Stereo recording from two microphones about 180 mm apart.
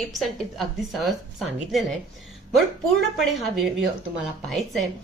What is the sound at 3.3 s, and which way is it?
A woman's voice, centre (ahead or behind).